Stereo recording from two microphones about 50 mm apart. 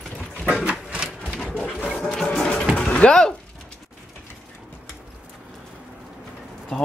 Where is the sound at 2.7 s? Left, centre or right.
Left.